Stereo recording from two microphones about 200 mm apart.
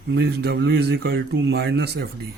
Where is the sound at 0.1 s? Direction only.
55° right (ahead or behind).